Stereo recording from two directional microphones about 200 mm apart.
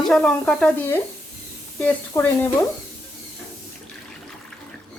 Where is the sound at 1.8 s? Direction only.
10° left (ahead or behind).